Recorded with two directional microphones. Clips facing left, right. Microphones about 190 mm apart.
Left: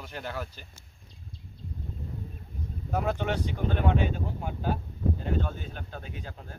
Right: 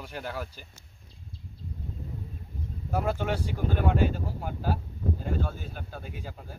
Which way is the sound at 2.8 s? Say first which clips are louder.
Even; 5° right (ahead or behind).